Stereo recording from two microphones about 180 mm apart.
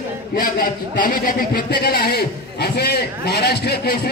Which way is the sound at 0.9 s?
50° left (ahead or behind).